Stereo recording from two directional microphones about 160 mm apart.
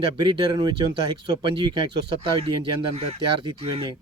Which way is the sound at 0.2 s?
30° right (ahead or behind).